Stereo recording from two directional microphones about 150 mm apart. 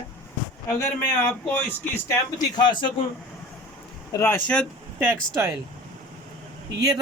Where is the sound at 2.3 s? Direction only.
30° left (ahead or behind).